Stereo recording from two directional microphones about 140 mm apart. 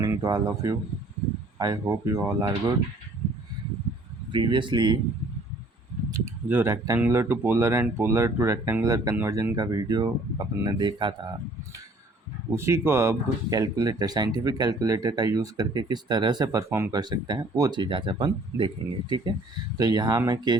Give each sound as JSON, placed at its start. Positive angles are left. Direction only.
{"t": 0.0, "sound": "speech", "side_deg": -25}
{"t": 4.3, "sound": "speech", "side_deg": -35}
{"t": 6.1, "sound": "a sound", "side_deg": -25}
{"t": 6.5, "sound": "speech", "side_deg": -20}
{"t": 12.5, "sound": "speech", "side_deg": -20}
{"t": 17.0, "sound": "speech", "side_deg": -30}